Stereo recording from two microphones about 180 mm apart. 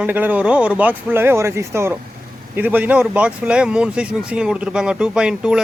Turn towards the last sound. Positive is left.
turn(degrees=-5)  # may be behind; listen again after turning